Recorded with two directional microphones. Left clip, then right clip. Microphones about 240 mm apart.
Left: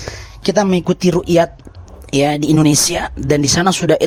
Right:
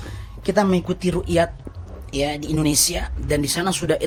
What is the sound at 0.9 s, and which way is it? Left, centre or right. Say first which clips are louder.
A woman's voice: left 9 dB; left.